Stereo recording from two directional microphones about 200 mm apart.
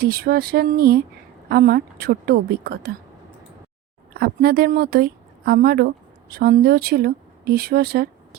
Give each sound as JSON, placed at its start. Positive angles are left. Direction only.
{"t": 0.0, "sound": "a woman's voice", "side_deg": -50}
{"t": 4.1, "sound": "a woman's voice", "side_deg": -50}